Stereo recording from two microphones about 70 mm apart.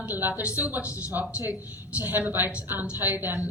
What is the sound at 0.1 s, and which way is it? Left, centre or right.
A woman's voice, right.